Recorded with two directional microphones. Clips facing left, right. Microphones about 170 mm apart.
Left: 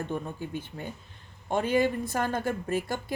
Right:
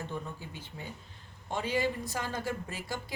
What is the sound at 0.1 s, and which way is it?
A woman's voice, 55° left (ahead or behind).